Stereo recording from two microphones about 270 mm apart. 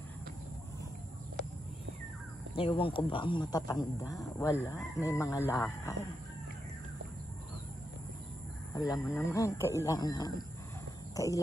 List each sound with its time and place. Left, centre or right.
2.5 s speech: centre
8.7 s speech: centre